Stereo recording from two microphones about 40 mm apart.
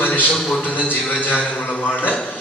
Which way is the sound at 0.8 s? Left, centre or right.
Left.